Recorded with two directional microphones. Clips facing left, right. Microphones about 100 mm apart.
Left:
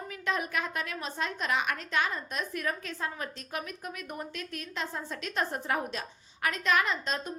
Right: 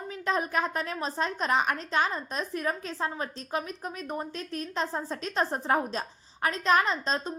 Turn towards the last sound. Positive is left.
turn(degrees=-35)  # may be behind; listen again after turning